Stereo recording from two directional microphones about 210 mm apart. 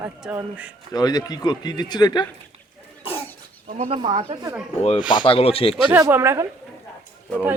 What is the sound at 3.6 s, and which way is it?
Speech, 35° right (ahead or behind).